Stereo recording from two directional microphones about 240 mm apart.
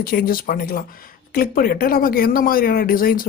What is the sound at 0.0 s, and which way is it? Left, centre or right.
Speech, left.